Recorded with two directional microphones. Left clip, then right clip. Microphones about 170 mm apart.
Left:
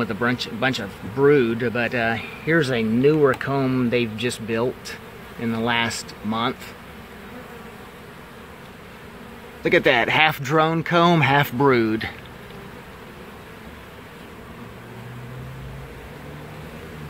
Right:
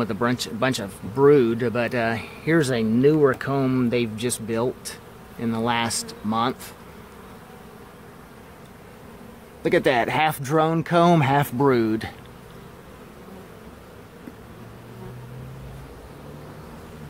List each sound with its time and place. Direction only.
0.0 s speech: 25° right (ahead or behind)
9.6 s speech: 20° right (ahead or behind)